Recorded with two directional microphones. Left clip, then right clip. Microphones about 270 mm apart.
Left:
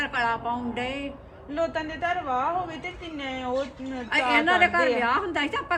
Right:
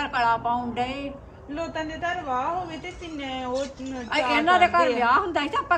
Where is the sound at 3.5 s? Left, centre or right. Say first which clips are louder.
Left 2 dB; left.